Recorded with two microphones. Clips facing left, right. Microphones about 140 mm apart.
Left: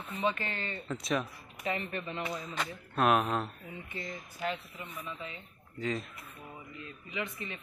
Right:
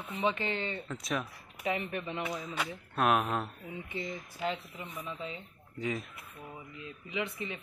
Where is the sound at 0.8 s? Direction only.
Centre (ahead or behind).